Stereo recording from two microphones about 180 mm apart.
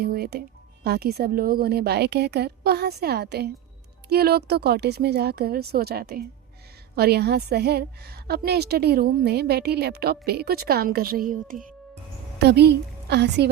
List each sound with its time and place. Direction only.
0.0 s a woman's voice: 60° right (ahead or behind)
12.4 s a woman's voice: 65° right (ahead or behind)